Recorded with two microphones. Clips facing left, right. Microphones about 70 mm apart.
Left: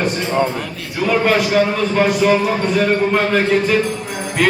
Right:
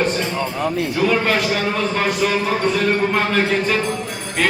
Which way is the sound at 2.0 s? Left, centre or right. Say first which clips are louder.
Left 7 dB; centre.